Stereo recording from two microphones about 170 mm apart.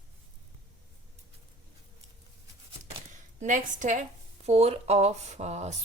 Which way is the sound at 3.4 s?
50° right (ahead or behind).